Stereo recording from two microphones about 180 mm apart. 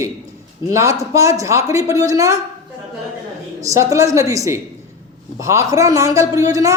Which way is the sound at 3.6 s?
15° right (ahead or behind).